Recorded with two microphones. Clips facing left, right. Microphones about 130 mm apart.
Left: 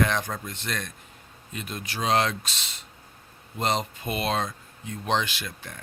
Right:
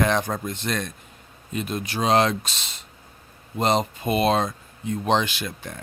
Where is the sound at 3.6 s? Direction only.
25° right (ahead or behind).